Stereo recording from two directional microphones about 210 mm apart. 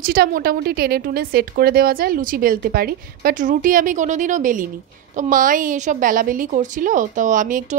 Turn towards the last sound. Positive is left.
turn(degrees=-40)  # may be behind; listen again after turning